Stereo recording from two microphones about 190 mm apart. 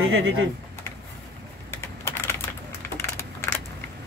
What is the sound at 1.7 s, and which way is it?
Typing, 15° left (ahead or behind).